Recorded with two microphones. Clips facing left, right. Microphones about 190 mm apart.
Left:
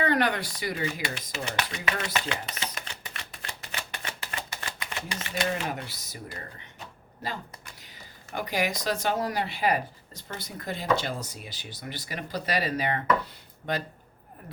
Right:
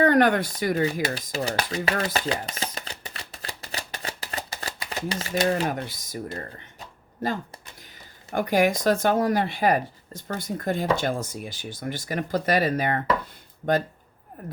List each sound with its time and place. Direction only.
0.0 s speech: 50° right (ahead or behind)
8.3 s speech: 50° right (ahead or behind)
14.4 s a sound: 50° right (ahead or behind)